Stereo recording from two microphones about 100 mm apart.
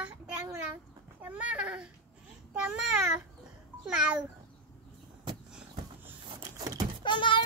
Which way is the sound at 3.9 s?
10° right (ahead or behind).